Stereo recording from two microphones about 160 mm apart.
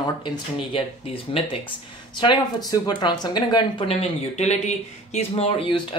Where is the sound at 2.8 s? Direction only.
25° left (ahead or behind).